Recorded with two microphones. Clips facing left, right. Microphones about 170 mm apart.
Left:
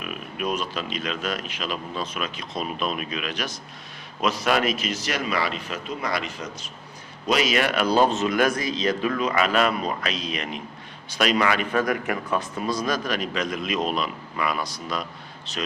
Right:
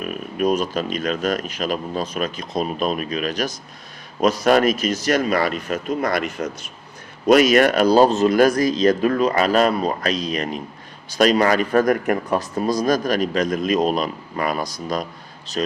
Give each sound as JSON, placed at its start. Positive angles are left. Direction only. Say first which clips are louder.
{"t": 0.0, "sound": "a man's voice", "louder": "right 8 dB", "side_deg": -40}